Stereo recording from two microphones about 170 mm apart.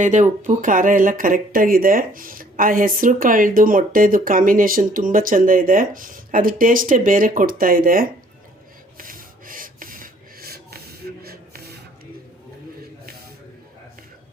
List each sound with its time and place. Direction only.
0.0 s speech: 45° right (ahead or behind)
9.0 s snort: 55° right (ahead or behind)